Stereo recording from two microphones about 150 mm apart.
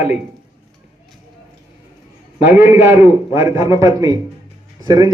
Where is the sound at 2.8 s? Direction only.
15° right (ahead or behind).